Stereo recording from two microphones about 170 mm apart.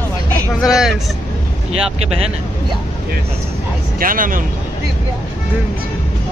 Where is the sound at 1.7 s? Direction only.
40° right (ahead or behind).